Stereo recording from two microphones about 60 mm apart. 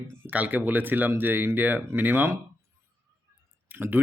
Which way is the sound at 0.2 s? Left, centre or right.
Right.